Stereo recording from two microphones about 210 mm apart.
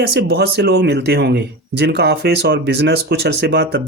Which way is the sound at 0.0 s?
50° right (ahead or behind).